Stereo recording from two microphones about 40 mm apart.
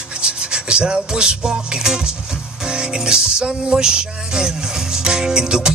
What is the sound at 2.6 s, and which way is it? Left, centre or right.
Music, centre.